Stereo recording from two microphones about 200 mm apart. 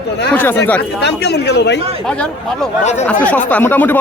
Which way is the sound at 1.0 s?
55° left (ahead or behind).